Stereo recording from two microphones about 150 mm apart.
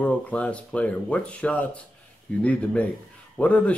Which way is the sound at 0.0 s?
10° left (ahead or behind).